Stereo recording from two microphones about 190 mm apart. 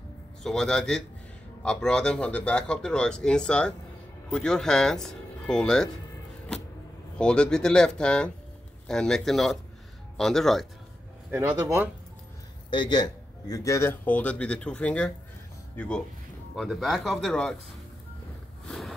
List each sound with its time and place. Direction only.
0.4 s speech: 5° left (ahead or behind)
7.2 s speech: 5° left (ahead or behind)
11.2 s speech: 10° right (ahead or behind)
12.6 s a man's voice: 25° left (ahead or behind); by 17.6 s 5° left (ahead or behind)
18.7 s a sound: centre (ahead or behind)